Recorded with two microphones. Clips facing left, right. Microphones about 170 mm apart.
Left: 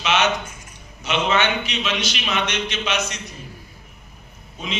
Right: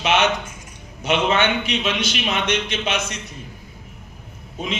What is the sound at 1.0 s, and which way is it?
A man's voice, 55° right (ahead or behind).